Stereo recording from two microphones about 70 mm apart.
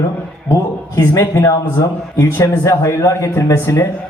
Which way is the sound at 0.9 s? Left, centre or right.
Left.